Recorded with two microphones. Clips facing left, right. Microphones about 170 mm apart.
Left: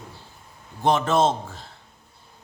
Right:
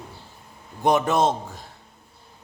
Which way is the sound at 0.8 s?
15° right (ahead or behind).